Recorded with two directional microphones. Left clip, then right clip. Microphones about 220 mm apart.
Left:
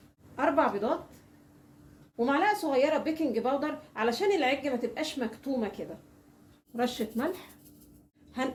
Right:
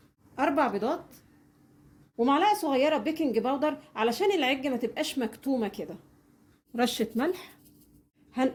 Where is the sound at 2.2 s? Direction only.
45° right (ahead or behind).